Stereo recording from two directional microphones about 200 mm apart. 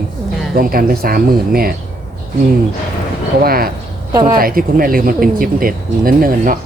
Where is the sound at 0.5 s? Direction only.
50° right (ahead or behind).